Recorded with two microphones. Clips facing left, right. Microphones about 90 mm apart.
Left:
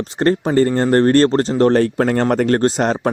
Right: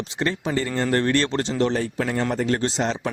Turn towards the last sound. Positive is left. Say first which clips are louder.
# left 8 dB
turn(degrees=50)  # may be behind; listen again after turning